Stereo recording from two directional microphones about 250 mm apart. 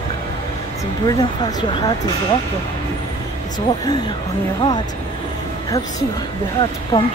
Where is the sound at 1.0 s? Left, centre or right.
Centre.